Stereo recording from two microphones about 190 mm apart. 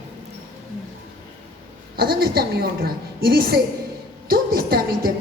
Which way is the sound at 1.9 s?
55° right (ahead or behind).